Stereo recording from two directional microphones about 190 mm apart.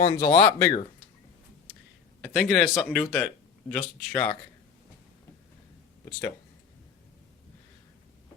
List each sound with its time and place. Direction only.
0.0 s speech: 20° left (ahead or behind)
2.2 s speech: centre (ahead or behind)